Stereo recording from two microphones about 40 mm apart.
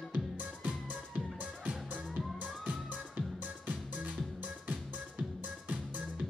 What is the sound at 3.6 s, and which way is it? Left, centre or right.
Music, right.